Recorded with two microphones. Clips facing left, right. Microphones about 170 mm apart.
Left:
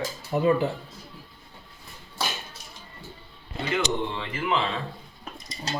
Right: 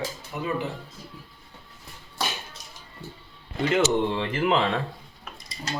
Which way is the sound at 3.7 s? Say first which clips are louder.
Right 5 dB; 50° right (ahead or behind).